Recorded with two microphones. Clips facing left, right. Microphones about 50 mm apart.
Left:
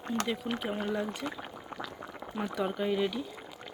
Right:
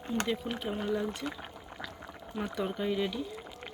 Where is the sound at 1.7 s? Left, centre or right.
Left.